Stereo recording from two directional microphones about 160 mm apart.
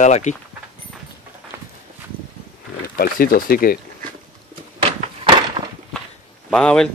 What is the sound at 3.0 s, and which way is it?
Speech, 65° left (ahead or behind).